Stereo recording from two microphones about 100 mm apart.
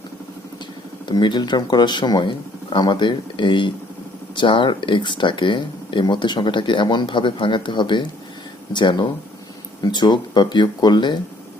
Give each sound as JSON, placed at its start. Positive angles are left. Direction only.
{"t": 1.0, "sound": "speech", "side_deg": 50}